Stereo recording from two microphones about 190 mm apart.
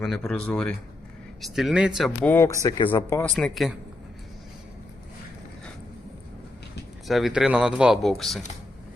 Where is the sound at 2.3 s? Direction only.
15° left (ahead or behind).